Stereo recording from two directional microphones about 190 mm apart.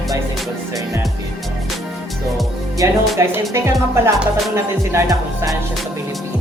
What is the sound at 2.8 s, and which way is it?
Speech, 15° right (ahead or behind).